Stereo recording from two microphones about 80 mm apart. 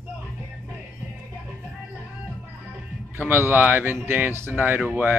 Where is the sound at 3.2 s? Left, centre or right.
Right.